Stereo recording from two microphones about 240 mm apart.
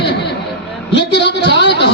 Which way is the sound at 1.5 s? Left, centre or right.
Left.